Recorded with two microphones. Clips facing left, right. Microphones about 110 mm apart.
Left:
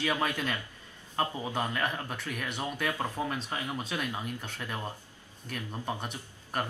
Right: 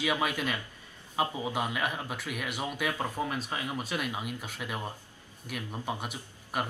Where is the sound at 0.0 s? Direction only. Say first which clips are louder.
Right 1 dB; 10° right (ahead or behind).